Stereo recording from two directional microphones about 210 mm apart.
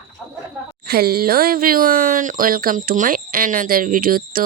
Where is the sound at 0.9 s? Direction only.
45° right (ahead or behind).